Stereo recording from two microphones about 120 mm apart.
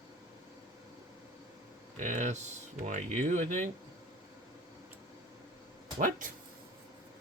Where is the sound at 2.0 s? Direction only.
90° right.